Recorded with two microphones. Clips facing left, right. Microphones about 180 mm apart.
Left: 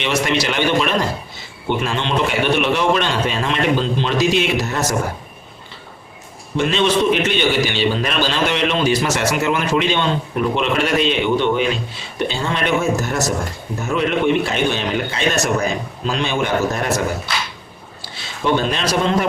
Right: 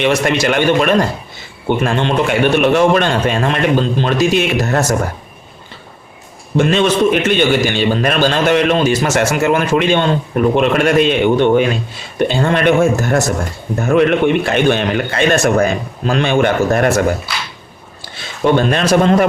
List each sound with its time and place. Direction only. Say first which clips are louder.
0.0 s a man's voice: right 5 dB; 50° right (ahead or behind)
6.6 s a man's voice: right 4 dB; 50° right (ahead or behind)
18.7 s a man's voice: right 6 dB; 50° right (ahead or behind)